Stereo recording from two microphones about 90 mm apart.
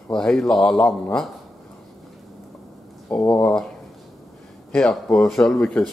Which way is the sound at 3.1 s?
10° left (ahead or behind).